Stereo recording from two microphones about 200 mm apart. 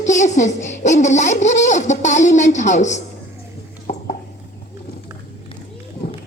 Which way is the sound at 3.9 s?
35° left (ahead or behind).